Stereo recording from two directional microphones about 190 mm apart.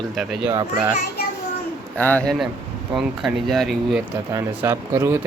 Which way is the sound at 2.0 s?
10° left (ahead or behind).